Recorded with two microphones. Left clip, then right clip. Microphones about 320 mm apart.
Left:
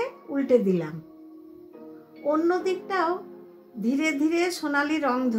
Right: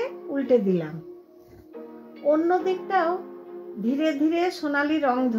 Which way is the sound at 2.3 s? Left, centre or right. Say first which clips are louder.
Right 2 dB; centre.